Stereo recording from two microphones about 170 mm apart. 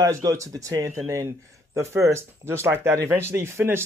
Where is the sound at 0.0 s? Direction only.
20° right (ahead or behind).